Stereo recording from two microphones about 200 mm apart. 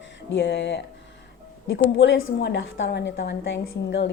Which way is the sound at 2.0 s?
65° left (ahead or behind).